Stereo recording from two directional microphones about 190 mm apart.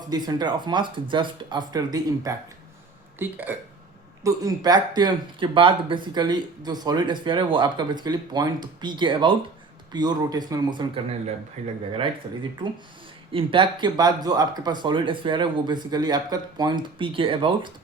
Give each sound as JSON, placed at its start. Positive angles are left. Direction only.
{"t": 0.1, "sound": "speech", "side_deg": -20}
{"t": 3.2, "sound": "speech", "side_deg": -10}
{"t": 11.6, "sound": "speech", "side_deg": -35}
{"t": 13.3, "sound": "speech", "side_deg": -25}